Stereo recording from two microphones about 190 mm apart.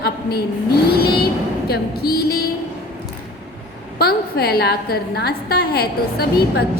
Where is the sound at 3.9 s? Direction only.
55° left (ahead or behind).